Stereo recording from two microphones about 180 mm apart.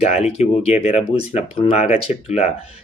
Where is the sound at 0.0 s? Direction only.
35° left (ahead or behind).